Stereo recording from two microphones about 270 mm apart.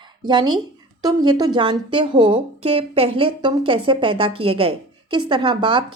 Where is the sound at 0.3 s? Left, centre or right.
Centre.